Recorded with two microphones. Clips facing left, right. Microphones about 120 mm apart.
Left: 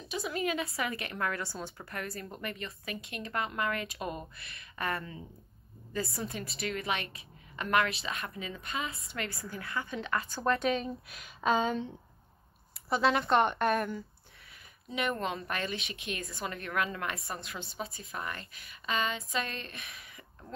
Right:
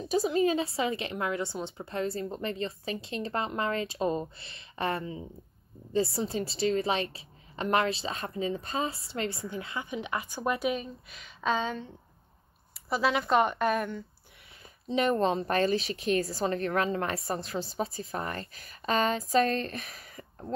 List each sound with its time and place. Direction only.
0.3 s a woman's voice: 30° right (ahead or behind); by 11.8 s 5° left (ahead or behind)
12.9 s a woman's voice: centre (ahead or behind)
14.9 s a woman's voice: 30° right (ahead or behind)